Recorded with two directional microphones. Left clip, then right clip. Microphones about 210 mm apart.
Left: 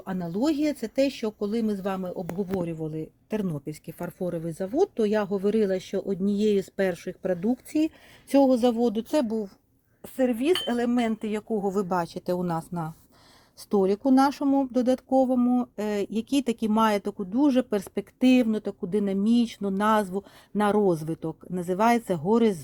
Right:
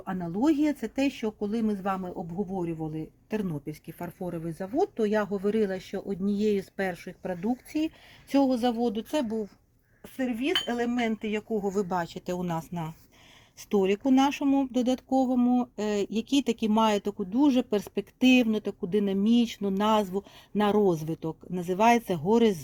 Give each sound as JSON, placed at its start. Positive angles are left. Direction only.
{"t": 0.0, "sound": "speech", "side_deg": 45}